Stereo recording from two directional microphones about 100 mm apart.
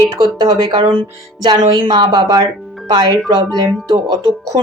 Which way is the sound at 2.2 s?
45° right (ahead or behind).